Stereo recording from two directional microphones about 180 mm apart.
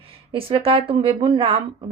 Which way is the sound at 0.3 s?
30° right (ahead or behind).